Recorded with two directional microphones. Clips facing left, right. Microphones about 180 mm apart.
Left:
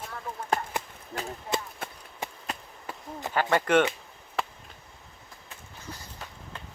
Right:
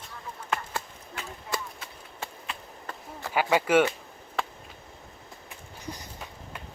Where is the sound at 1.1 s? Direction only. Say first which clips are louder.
Left 4 dB; 45° left (ahead or behind).